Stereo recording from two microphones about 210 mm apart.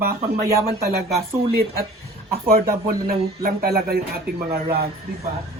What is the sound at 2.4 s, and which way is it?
Speech, 45° right (ahead or behind).